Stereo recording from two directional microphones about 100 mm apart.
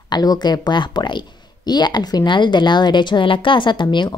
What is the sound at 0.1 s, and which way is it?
A woman's voice, 45° left (ahead or behind).